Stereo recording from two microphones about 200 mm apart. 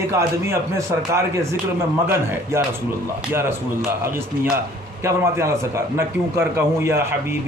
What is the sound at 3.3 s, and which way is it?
A man's voice, 10° right (ahead or behind).